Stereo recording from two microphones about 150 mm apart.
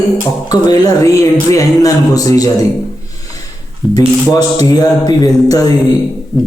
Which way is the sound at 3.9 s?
25° left (ahead or behind).